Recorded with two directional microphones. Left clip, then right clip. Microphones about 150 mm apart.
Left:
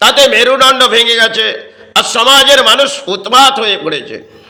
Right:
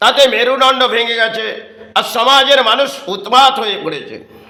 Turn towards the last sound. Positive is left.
turn(degrees=15)  # may be behind; listen again after turning